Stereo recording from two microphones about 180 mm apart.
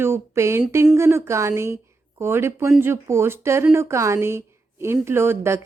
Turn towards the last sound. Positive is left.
turn(degrees=-15)  # may be behind; listen again after turning